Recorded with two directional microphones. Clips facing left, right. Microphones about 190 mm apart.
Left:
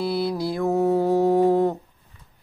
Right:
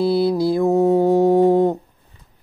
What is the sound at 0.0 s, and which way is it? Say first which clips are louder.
Music: right 7 dB; 30° right (ahead or behind).